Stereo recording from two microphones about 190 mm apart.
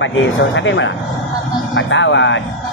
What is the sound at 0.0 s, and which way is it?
Speech, 75° left (ahead or behind).